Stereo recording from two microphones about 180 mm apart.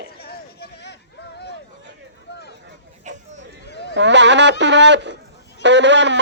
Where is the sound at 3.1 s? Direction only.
40° right (ahead or behind).